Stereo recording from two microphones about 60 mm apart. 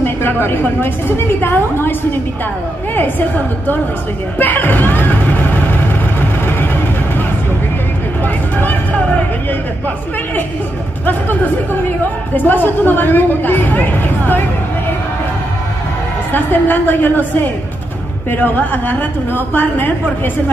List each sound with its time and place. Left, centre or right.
0.0 s speech: left
3.0 s speech: left
4.4 s music: left
8.5 s speech: left
11.1 s speech: left
16.3 s speech: left